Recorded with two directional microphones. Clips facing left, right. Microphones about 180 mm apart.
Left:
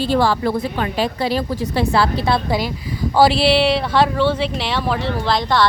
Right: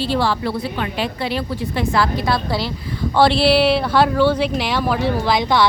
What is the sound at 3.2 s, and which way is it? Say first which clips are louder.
Speech: even; centre (ahead or behind).